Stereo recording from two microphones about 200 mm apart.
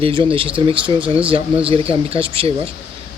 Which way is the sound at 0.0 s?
25° right (ahead or behind).